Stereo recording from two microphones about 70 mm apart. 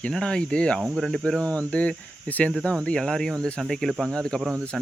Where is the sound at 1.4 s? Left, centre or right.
Centre.